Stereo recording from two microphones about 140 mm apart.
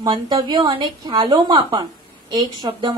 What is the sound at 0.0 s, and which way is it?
A woman's voice, 30° right (ahead or behind).